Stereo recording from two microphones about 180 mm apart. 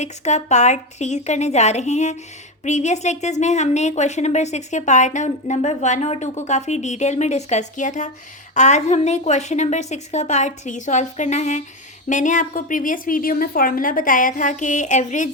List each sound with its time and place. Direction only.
0.0 s a woman's voice: 40° left (ahead or behind)